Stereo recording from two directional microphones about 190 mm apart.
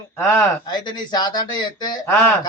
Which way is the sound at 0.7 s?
20° left (ahead or behind).